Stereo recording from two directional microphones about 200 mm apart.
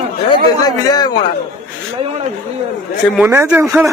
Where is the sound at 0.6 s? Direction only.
20° left (ahead or behind).